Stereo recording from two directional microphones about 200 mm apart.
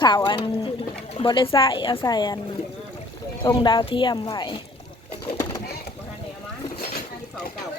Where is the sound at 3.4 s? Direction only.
20° left (ahead or behind).